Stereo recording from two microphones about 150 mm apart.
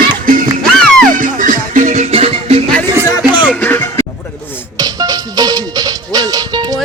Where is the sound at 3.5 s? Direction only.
10° left (ahead or behind).